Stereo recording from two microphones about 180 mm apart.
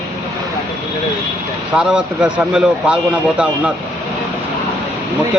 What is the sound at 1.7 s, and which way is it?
A man's voice, 5° right (ahead or behind).